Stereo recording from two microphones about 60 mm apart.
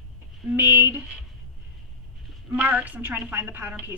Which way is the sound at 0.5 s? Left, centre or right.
Right.